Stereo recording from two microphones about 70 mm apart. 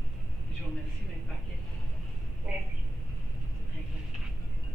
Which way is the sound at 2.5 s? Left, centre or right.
Centre.